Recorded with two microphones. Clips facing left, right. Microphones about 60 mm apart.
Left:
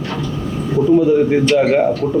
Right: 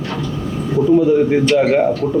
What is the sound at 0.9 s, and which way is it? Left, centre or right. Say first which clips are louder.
Speech: even; left.